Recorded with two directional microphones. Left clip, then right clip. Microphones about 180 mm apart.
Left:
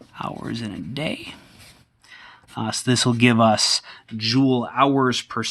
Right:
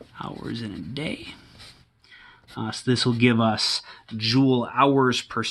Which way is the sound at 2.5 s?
35° left (ahead or behind).